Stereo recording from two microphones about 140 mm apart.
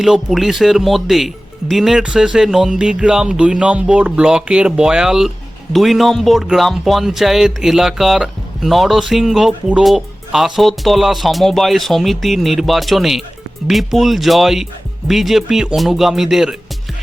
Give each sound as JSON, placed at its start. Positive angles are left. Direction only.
{"t": 0.0, "sound": "speech", "side_deg": 0}